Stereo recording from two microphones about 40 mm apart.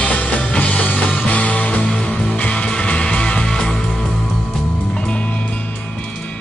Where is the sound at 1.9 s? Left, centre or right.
Centre.